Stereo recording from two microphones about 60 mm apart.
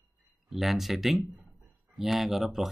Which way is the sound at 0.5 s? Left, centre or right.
Centre.